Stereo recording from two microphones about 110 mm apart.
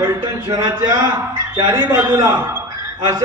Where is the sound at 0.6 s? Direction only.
45° right (ahead or behind).